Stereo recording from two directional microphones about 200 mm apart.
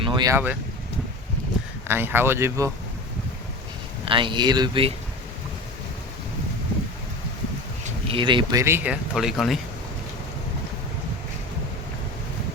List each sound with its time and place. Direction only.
0.0 s speech: 20° right (ahead or behind)
1.9 s speech: 10° right (ahead or behind)
4.0 s speech: 25° right (ahead or behind)
7.9 s speech: 30° right (ahead or behind); by 9.6 s centre (ahead or behind)